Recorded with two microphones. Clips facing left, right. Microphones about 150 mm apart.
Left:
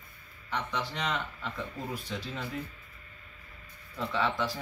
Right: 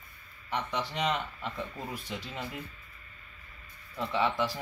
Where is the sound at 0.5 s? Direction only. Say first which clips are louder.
Right 1 dB; 15° right (ahead or behind).